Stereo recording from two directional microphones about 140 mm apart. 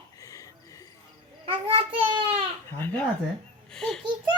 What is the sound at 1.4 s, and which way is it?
Child singing, 40° right (ahead or behind).